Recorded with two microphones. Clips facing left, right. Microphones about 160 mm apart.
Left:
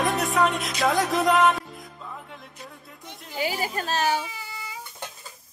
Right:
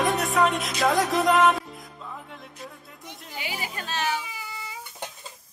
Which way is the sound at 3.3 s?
40° left (ahead or behind).